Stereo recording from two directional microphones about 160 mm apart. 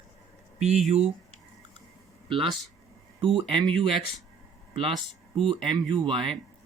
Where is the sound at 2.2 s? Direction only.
30° right (ahead or behind).